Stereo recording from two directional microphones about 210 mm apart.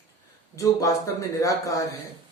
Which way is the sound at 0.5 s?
15° left (ahead or behind).